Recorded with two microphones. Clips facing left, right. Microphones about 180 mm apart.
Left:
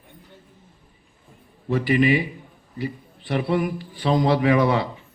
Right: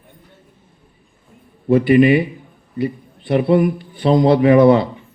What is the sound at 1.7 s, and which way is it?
Speech, 55° right (ahead or behind).